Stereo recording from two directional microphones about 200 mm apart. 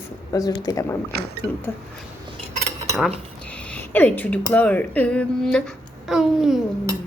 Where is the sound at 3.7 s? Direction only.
10° left (ahead or behind).